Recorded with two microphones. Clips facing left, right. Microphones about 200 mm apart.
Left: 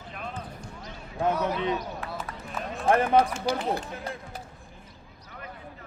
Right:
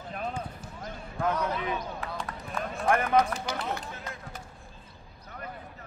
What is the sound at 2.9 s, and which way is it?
Speech, 30° left (ahead or behind).